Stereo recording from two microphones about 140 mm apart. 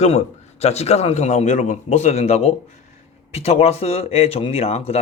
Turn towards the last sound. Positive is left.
turn(degrees=45)  # may be behind; listen again after turning